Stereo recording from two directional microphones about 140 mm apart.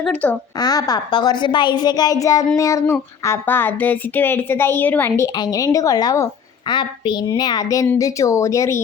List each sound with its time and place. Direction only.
0.0 s speech: 10° left (ahead or behind)
0.6 s a woman's voice: 25° left (ahead or behind)